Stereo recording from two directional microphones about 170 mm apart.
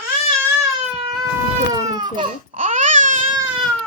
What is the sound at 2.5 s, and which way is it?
Babbling, 50° right (ahead or behind).